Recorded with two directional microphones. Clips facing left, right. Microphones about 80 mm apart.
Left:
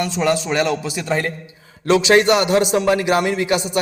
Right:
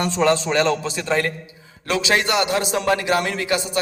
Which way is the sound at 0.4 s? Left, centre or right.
Centre.